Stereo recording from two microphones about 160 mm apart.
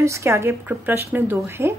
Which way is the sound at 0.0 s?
20° right (ahead or behind).